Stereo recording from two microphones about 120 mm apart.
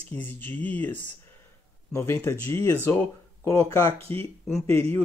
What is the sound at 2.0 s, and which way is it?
Speech, 20° left (ahead or behind).